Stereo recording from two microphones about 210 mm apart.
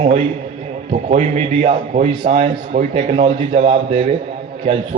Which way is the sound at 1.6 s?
35° right (ahead or behind).